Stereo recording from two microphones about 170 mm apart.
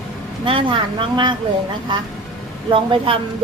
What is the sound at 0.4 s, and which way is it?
Speech, 30° right (ahead or behind).